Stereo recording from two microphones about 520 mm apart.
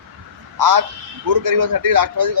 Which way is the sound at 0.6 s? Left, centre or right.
Right.